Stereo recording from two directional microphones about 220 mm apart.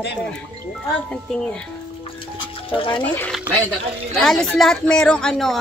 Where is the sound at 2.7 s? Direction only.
25° left (ahead or behind).